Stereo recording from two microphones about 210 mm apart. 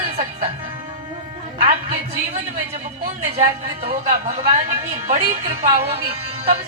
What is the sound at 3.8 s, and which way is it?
Speech, 30° right (ahead or behind).